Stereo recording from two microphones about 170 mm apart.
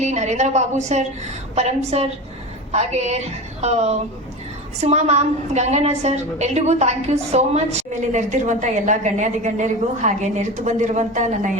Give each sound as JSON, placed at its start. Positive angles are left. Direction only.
{"t": 0.0, "sound": "a woman's voice", "side_deg": -40}